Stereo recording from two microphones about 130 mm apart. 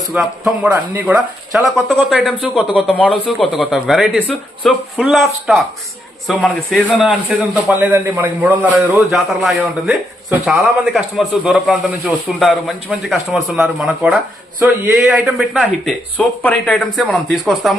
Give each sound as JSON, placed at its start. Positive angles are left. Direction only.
{"t": 0.1, "sound": "speech", "side_deg": -5}
{"t": 0.7, "sound": "speech", "side_deg": -20}
{"t": 1.1, "sound": "speech", "side_deg": 0}
{"t": 7.0, "sound": "a man's voice", "side_deg": -10}
{"t": 9.1, "sound": "speech", "side_deg": 0}
{"t": 16.1, "sound": "speech", "side_deg": 10}